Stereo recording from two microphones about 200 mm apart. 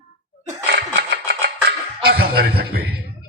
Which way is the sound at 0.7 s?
55° right (ahead or behind).